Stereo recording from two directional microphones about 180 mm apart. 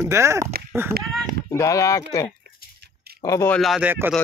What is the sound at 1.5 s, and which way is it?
Speech, 15° left (ahead or behind).